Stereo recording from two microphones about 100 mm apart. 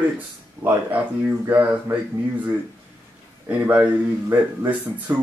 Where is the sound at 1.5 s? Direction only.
20° right (ahead or behind).